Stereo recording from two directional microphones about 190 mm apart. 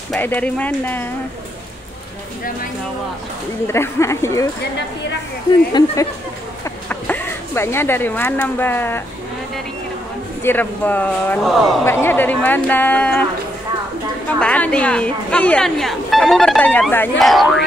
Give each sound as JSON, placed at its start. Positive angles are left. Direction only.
{"t": 0.1, "sound": "speech", "side_deg": 10}
{"t": 3.6, "sound": "speech", "side_deg": 15}
{"t": 5.7, "sound": "speech", "side_deg": 20}
{"t": 6.6, "sound": "speech", "side_deg": 10}
{"t": 10.4, "sound": "speech", "side_deg": 10}
{"t": 14.4, "sound": "speech", "side_deg": 5}